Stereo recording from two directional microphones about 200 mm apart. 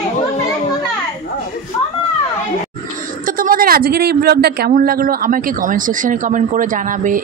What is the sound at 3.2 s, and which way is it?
Speech, 45° right (ahead or behind).